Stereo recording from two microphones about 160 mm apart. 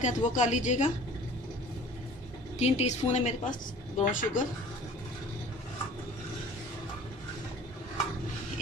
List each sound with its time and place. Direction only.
0.0 s a woman's voice: 50° left (ahead or behind)
2.6 s a woman's voice: 45° left (ahead or behind)
4.0 s speech: 55° left (ahead or behind)